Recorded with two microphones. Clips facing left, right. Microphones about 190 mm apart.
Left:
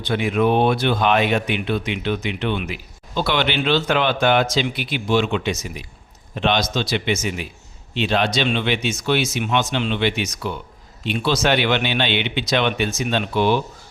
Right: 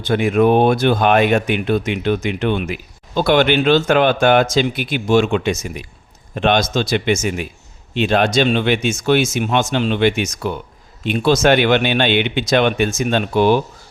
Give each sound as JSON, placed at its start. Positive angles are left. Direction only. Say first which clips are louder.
{"t": 0.0, "sound": "speech", "louder": "right 5 dB", "side_deg": -45}